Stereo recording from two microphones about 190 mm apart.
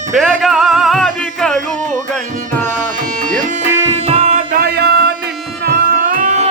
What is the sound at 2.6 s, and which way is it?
Music, 40° right (ahead or behind).